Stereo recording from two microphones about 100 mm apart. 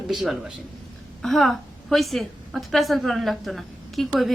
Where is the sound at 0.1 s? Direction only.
Centre (ahead or behind).